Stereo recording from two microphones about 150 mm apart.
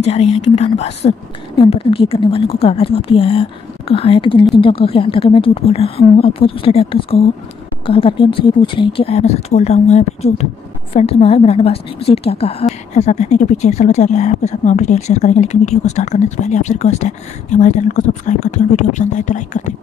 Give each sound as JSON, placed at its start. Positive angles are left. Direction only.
{"t": 0.0, "sound": "a woman's voice", "side_deg": 45}